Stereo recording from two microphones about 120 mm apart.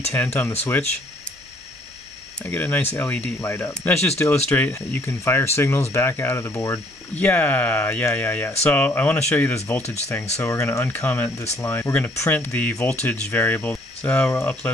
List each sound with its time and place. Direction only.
0.1 s speech: 20° left (ahead or behind)
2.4 s speech: 20° left (ahead or behind)